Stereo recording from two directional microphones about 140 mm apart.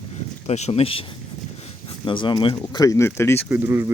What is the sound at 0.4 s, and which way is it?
Speech, 50° left (ahead or behind).